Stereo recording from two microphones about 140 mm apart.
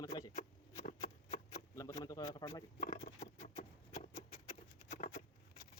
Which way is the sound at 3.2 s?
65° left (ahead or behind).